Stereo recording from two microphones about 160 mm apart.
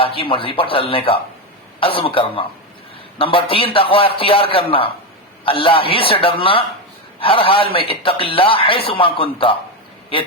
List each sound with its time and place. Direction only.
0.0 s a man's voice: 35° left (ahead or behind)